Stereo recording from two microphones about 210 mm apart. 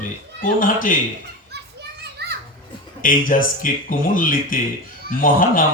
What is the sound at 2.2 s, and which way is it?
Children playing, 50° right (ahead or behind).